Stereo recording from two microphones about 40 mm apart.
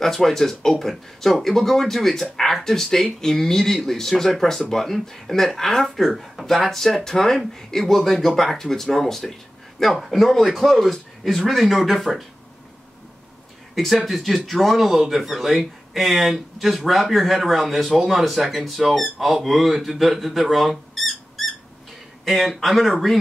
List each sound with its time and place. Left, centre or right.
0.0 s speech: centre
13.7 s speech: centre